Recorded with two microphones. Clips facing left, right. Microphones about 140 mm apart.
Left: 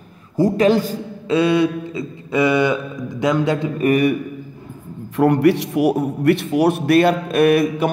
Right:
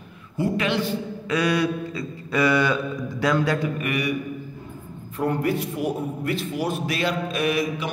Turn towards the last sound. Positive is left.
turn(degrees=55)  # may be behind; listen again after turning